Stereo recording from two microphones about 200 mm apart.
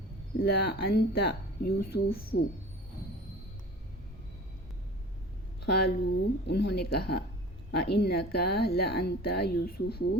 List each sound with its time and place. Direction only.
0.4 s a woman's voice: 50° left (ahead or behind)
5.6 s a woman's voice: 50° left (ahead or behind)